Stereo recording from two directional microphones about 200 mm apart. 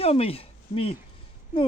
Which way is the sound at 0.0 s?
30° left (ahead or behind).